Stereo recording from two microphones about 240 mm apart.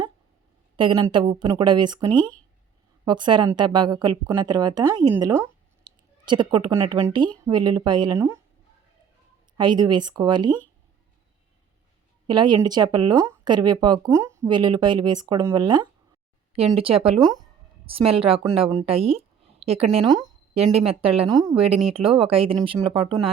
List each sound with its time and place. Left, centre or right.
0.8 s speech: centre
2.1 s speech: centre
3.0 s speech: centre
9.6 s speech: centre
12.3 s speech: centre
21.5 s speech: right
21.9 s speech: right